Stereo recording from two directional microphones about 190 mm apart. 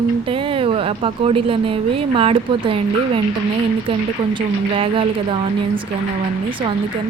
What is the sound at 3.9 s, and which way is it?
A woman's voice, 25° right (ahead or behind).